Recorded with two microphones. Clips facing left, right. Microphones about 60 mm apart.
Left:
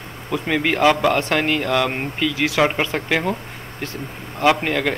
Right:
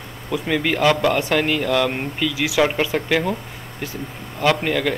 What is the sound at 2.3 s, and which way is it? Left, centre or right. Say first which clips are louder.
Speech: right 1 dB; left.